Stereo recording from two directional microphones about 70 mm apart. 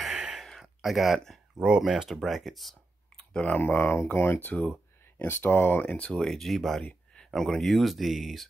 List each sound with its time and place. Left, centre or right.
0.4 s a sound: centre
1.6 s speech: centre
3.2 s clicking: centre
3.5 s speech: left
5.9 s speech: centre
6.2 s speech: centre